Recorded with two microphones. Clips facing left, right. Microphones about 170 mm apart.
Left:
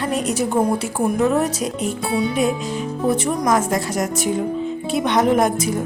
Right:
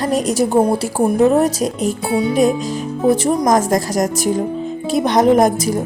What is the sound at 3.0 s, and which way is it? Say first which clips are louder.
Speech: right 5 dB; 35° right (ahead or behind).